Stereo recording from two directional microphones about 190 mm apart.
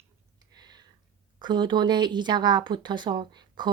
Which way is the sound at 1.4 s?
25° right (ahead or behind).